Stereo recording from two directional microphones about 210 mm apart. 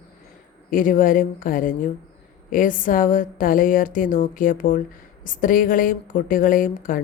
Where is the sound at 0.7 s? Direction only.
40° left (ahead or behind).